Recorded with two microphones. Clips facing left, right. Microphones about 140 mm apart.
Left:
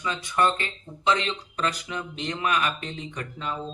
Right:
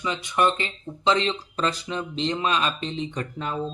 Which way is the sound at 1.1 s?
30° right (ahead or behind).